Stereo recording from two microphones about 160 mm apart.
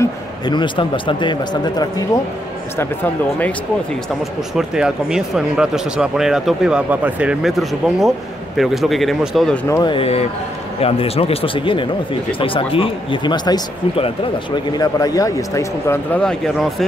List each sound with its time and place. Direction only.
0.5 s speech: 30° left (ahead or behind)
2.8 s speech: 10° left (ahead or behind)
4.6 s speech: 5° right (ahead or behind)
9.7 s speech: 20° left (ahead or behind)
9.9 s speech: 40° left (ahead or behind); by 16.8 s centre (ahead or behind)